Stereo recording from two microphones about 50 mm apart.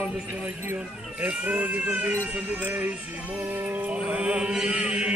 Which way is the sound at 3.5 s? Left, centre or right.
Right.